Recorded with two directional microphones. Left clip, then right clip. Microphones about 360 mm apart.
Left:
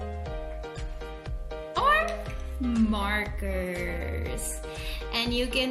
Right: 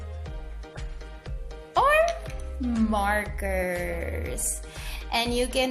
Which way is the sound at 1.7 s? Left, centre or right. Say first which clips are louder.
Right 3 dB; centre.